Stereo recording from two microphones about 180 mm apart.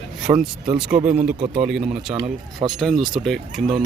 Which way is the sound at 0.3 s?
20° right (ahead or behind).